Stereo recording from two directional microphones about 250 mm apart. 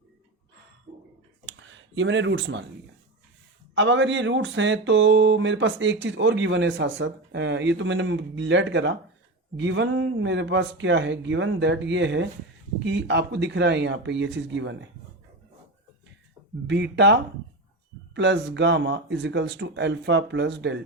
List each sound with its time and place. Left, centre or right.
1.5 s a sound: right
3.8 s speech: right
16.6 s speech: right